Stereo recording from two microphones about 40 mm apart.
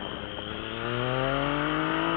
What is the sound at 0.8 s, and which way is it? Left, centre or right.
Vehicle, centre.